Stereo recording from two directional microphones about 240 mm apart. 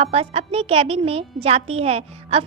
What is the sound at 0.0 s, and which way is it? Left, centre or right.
A woman's voice, right.